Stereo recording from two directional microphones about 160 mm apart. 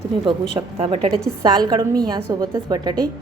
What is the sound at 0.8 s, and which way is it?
A woman's voice, 35° right (ahead or behind).